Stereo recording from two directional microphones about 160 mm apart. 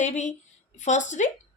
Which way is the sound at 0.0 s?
50° left (ahead or behind).